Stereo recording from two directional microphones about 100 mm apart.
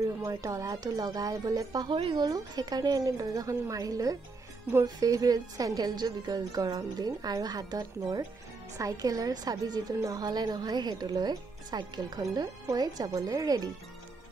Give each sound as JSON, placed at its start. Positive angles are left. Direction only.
{"t": 0.2, "sound": "a woman's voice", "side_deg": -35}